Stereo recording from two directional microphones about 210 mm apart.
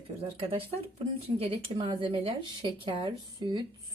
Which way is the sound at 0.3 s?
30° right (ahead or behind).